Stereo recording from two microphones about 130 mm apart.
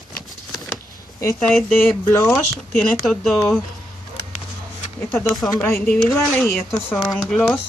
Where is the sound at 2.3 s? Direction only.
Centre (ahead or behind).